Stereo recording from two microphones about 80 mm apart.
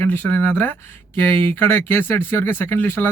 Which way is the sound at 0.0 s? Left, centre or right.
Left.